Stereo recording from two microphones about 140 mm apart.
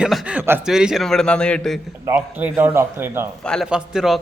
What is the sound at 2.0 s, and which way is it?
A man's voice, 10° right (ahead or behind).